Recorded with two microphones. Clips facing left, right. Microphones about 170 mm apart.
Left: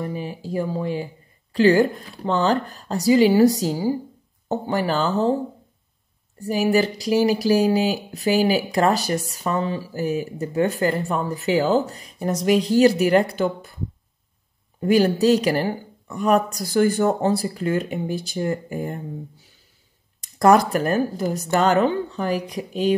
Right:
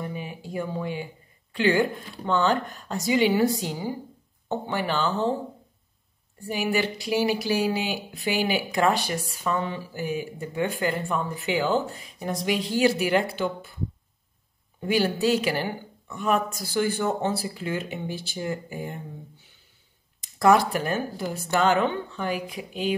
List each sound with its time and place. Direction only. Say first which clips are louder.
0.0 s speech: left 5 dB; 35° left (ahead or behind)
6.4 s speech: left 6 dB; 40° left (ahead or behind)
14.8 s speech: left 6 dB; 45° left (ahead or behind)